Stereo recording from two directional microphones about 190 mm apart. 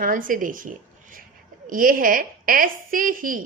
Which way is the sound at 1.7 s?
45° right (ahead or behind).